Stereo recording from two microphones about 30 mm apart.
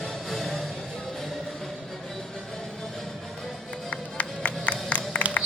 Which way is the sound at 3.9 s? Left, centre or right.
Left.